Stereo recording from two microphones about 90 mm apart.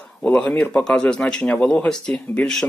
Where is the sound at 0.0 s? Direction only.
10° left (ahead or behind).